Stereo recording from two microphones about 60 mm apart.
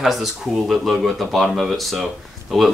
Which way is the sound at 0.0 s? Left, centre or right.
Centre.